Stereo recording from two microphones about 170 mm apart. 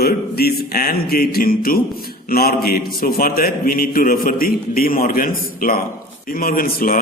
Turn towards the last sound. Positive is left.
turn(degrees=55)  # may be behind; listen again after turning